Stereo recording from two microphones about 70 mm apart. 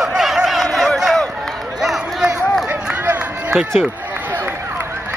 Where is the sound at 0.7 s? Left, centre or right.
Centre.